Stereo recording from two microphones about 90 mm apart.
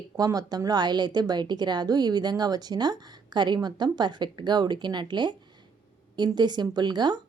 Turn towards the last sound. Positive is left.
turn(degrees=-55)  # may be behind; listen again after turning